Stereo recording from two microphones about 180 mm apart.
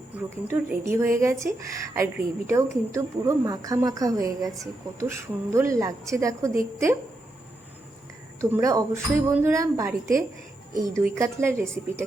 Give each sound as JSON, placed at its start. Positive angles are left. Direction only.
{"t": 0.2, "sound": "speech", "side_deg": -10}
{"t": 8.4, "sound": "speech", "side_deg": -20}